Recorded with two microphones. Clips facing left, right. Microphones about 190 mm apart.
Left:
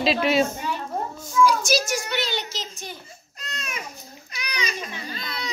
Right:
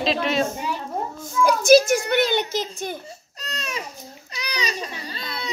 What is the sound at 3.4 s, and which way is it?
Baby cry, 35° right (ahead or behind).